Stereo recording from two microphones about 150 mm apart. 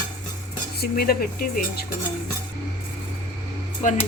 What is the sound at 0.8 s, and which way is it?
Cutlery, 85° left.